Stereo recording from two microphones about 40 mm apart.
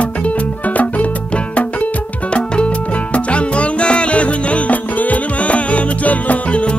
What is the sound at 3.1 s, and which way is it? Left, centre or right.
Music, left.